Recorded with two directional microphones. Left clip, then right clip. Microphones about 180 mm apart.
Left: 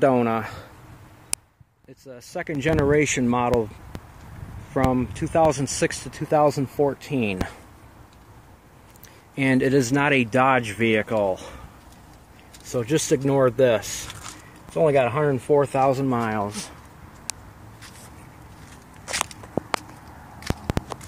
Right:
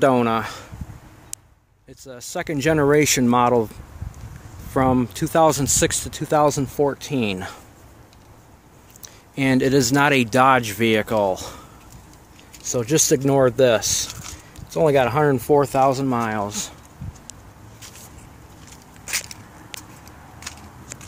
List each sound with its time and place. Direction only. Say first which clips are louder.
0.0 s speech: right 2 dB; centre (ahead or behind)
2.0 s speech: right 3 dB; 5° right (ahead or behind); by 3.6 s 20° right (ahead or behind)
4.7 s speech: right 3 dB; 20° right (ahead or behind)
9.0 s speech: right 2 dB; 10° right (ahead or behind)
12.7 s speech: right 3 dB; 15° right (ahead or behind)
15.9 s speech: right 1 dB; centre (ahead or behind)